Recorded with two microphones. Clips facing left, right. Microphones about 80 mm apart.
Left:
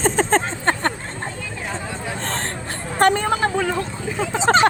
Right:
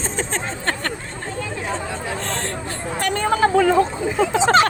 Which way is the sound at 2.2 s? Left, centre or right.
Left.